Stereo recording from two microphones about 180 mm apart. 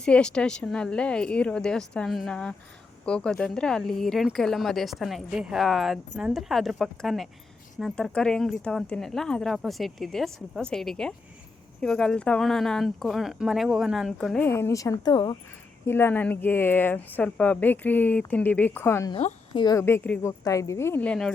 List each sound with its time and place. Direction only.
0.0 s speech: 5° left (ahead or behind)
14.4 s speech: 15° left (ahead or behind)
15.9 s speech: 15° left (ahead or behind)
19.1 s speech: 30° left (ahead or behind); by 21.3 s 5° left (ahead or behind)